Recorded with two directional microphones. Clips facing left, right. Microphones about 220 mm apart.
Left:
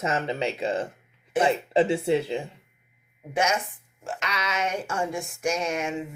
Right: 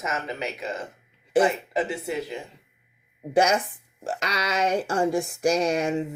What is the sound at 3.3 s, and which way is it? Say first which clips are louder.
Speech: right 5 dB; 35° right (ahead or behind).